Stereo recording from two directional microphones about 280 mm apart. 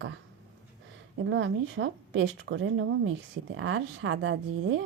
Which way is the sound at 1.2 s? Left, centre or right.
Right.